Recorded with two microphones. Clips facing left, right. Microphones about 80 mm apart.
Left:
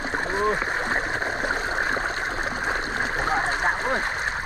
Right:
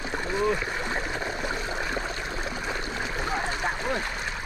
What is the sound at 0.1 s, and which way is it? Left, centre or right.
Stream, left.